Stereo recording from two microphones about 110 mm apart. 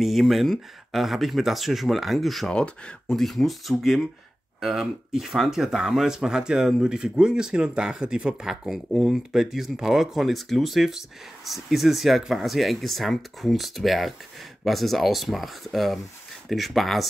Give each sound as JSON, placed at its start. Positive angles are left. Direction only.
{"t": 0.0, "sound": "speech", "side_deg": 0}